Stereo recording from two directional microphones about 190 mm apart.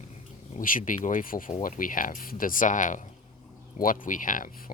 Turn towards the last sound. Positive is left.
turn(degrees=45)  # may be behind; listen again after turning